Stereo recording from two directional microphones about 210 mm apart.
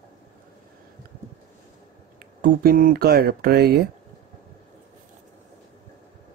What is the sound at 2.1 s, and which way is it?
Speech, 45° right (ahead or behind).